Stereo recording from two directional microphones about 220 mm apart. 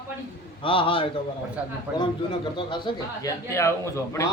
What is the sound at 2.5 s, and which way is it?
A man's voice, 20° left (ahead or behind).